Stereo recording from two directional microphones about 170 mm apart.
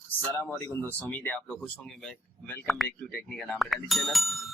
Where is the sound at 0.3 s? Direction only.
15° left (ahead or behind).